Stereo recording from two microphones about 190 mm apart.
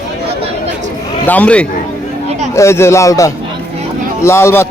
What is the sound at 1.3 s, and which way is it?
A man's voice, 5° left (ahead or behind).